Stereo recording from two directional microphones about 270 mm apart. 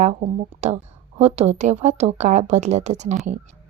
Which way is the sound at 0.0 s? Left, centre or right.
Right.